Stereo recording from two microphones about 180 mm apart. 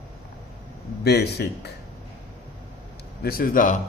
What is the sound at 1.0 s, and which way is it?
Speech, 65° left (ahead or behind).